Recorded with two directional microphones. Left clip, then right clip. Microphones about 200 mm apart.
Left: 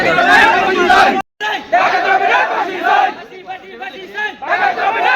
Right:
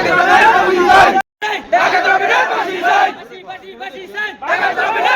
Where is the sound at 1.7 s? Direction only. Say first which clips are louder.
Even; 55° right (ahead or behind).